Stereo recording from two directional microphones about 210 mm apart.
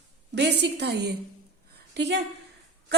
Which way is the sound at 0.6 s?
55° right (ahead or behind).